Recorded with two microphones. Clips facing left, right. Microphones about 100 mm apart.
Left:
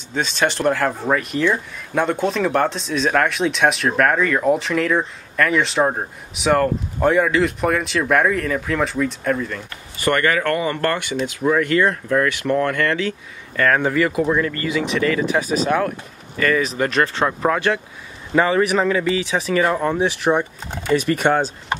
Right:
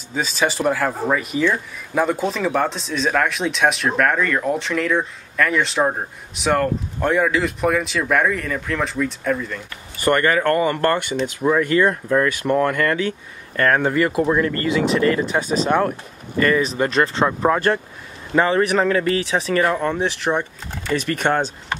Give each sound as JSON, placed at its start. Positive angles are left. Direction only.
{"t": 0.1, "sound": "speech", "side_deg": -5}
{"t": 10.0, "sound": "speech", "side_deg": -15}
{"t": 10.5, "sound": "speech", "side_deg": -35}
{"t": 11.4, "sound": "speech", "side_deg": -15}
{"t": 16.6, "sound": "speech", "side_deg": -30}
{"t": 17.2, "sound": "speech", "side_deg": 0}